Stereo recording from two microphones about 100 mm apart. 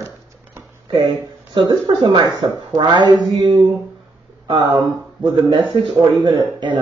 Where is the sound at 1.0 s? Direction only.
60° right (ahead or behind).